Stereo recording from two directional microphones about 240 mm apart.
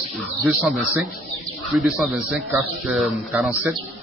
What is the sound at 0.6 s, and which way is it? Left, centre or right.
A man's voice, centre.